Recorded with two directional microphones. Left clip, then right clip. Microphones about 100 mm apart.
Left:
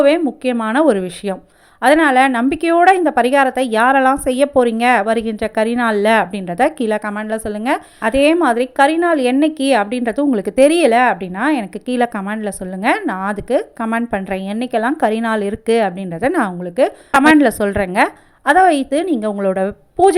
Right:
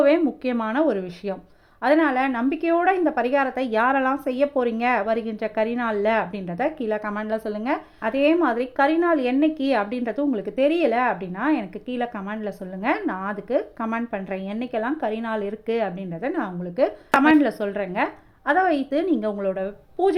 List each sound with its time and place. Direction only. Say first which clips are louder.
0.0 s a woman's voice: left 6 dB; 25° left (ahead or behind)
0.7 s a woman's voice: left 10 dB; 45° left (ahead or behind)
3.5 s a woman's voice: left 8 dB; 25° left (ahead or behind); by 7.0 s 45° left (ahead or behind)
7.0 s a woman's voice: left 5 dB; 20° left (ahead or behind)
10.3 s a woman's voice: left 11 dB; 50° left (ahead or behind); by 11.6 s 35° left (ahead or behind)
11.9 s a woman's voice: left 11 dB; 50° left (ahead or behind)
12.2 s a woman's voice: left 7 dB; 35° left (ahead or behind)
13.9 s a woman's voice: left 10 dB; 40° left (ahead or behind)
14.3 s a woman's voice: left 7 dB; 30° left (ahead or behind); by 16.5 s 45° left (ahead or behind)
16.8 s a woman's voice: left 7 dB; 30° left (ahead or behind)
17.2 s a woman's voice: left 7 dB; 40° left (ahead or behind)
18.9 s a woman's voice: left 5 dB; 25° left (ahead or behind)
19.3 s a woman's voice: left 8 dB; 50° left (ahead or behind)